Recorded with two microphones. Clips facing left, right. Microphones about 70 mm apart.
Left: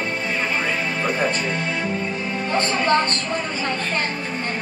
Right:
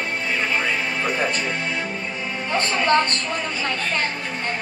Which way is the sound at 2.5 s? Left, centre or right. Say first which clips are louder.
Even; left.